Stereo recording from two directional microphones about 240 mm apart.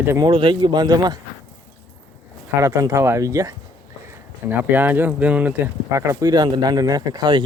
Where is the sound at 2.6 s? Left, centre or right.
Centre.